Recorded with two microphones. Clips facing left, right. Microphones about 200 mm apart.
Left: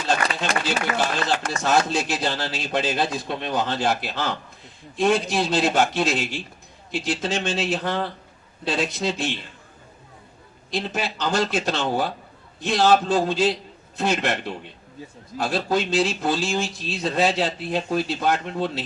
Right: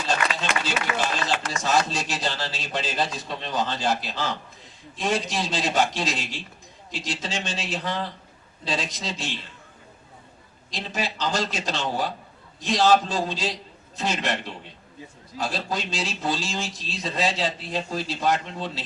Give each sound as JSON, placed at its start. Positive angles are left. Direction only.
{"t": 0.6, "sound": "speech", "side_deg": 55}
{"t": 10.7, "sound": "a man's voice", "side_deg": 60}
{"t": 15.4, "sound": "speech", "side_deg": 60}